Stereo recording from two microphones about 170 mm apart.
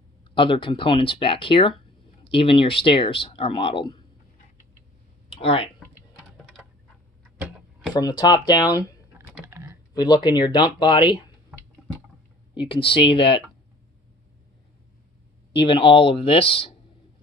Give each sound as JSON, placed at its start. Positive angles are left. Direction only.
{"t": 0.2, "sound": "speech", "side_deg": 30}
{"t": 5.3, "sound": "speech", "side_deg": 35}
{"t": 7.3, "sound": "a sound", "side_deg": -10}
{"t": 7.9, "sound": "speech", "side_deg": 25}
{"t": 9.4, "sound": "typing", "side_deg": -15}
{"t": 9.9, "sound": "speech", "side_deg": 25}
{"t": 12.5, "sound": "speech", "side_deg": 30}
{"t": 15.5, "sound": "speech", "side_deg": 30}